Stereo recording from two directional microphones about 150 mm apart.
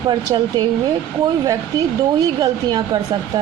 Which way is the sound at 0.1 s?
30° right (ahead or behind).